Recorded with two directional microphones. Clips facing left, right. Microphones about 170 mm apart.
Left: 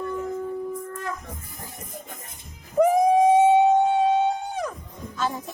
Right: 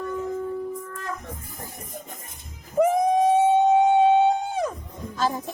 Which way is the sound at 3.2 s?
15° left (ahead or behind).